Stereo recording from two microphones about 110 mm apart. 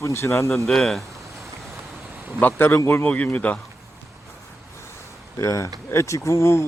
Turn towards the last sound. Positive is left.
turn(degrees=25)  # may be behind; listen again after turning